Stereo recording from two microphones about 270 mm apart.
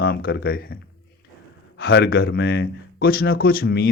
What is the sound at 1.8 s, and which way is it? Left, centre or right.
Speech, left.